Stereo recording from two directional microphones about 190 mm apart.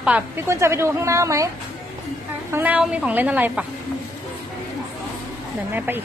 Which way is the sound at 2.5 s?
10° right (ahead or behind).